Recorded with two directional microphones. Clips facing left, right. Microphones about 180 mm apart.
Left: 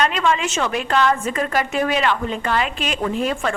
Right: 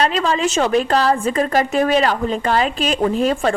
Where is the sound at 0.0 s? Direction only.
35° right (ahead or behind).